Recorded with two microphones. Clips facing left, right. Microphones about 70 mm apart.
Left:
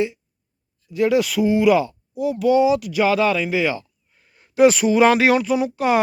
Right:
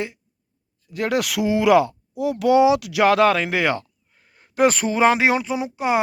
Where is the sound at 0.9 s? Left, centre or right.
Right.